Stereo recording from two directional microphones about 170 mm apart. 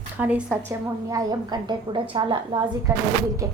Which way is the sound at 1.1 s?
20° right (ahead or behind).